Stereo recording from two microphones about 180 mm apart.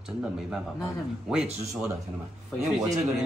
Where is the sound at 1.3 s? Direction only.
5° right (ahead or behind).